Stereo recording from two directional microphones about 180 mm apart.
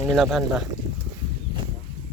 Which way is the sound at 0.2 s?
5° right (ahead or behind).